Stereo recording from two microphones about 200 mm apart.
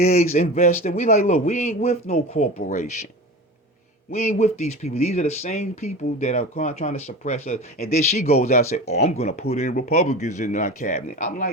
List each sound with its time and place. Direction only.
0.0 s speech: 35° left (ahead or behind)
0.3 s speech: 45° left (ahead or behind)
4.1 s speech: 35° left (ahead or behind)